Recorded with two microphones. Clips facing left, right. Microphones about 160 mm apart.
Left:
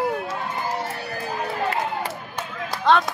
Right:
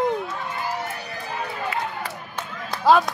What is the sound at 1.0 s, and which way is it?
Music, 45° left (ahead or behind).